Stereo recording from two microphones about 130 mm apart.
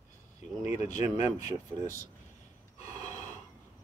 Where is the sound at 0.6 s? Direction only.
25° right (ahead or behind).